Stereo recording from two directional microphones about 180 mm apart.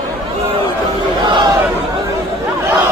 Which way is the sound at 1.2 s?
25° right (ahead or behind).